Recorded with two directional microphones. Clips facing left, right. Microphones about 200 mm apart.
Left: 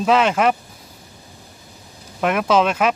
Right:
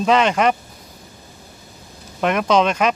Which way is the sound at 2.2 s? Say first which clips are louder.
Even; 5° left (ahead or behind).